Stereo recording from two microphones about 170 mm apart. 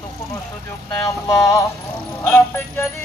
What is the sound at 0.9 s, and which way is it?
Speech, 15° left (ahead or behind).